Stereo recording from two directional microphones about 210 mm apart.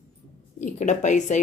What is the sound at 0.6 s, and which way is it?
Speech, 35° left (ahead or behind).